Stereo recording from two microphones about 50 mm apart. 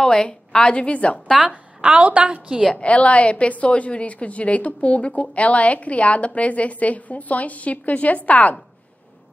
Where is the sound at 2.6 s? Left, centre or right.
Left.